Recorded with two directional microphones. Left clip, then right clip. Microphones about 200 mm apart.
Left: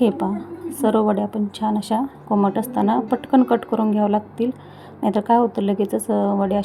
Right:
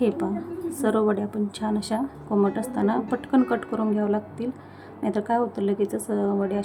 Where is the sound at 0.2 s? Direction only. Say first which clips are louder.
Left 3 dB; 10° left (ahead or behind).